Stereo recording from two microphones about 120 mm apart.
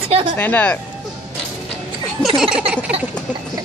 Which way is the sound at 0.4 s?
15° left (ahead or behind).